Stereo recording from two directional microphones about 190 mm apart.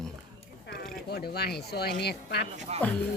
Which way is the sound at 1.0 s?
55° left (ahead or behind).